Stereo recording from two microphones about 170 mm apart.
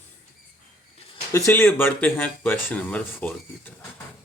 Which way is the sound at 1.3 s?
15° left (ahead or behind).